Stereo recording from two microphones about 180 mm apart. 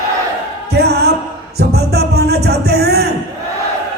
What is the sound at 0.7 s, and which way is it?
Music, 65° right (ahead or behind).